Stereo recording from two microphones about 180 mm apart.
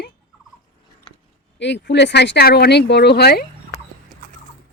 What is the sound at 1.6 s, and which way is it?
Speech, 80° left.